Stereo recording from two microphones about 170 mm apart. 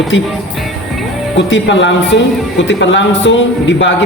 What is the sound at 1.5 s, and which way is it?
A man's voice, 90° left.